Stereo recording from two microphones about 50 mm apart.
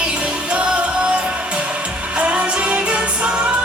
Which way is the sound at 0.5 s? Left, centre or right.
Centre.